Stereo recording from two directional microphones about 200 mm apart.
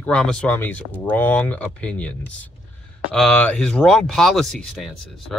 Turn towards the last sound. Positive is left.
turn(degrees=0)  # may be behind; listen again after turning